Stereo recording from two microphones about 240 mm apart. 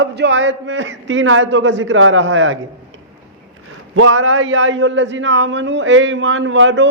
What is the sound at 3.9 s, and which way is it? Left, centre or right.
A man's voice, right.